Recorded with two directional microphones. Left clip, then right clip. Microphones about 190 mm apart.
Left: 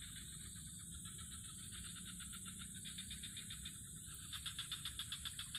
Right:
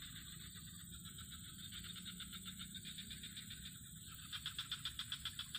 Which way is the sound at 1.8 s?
50° right (ahead or behind).